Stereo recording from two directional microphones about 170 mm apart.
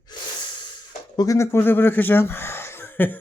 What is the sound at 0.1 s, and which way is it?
Hiss, 25° left (ahead or behind).